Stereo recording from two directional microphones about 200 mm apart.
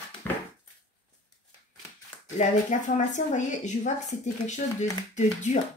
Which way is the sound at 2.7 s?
40° left (ahead or behind).